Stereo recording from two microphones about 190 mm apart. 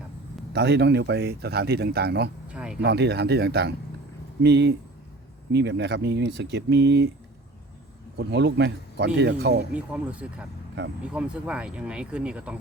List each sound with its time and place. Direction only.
0.5 s speech: 60° right (ahead or behind)
2.5 s a sound: 5° right (ahead or behind)
2.8 s speech: 60° right (ahead or behind)
8.1 s speech: 60° right (ahead or behind)
9.7 s speech: 5° right (ahead or behind)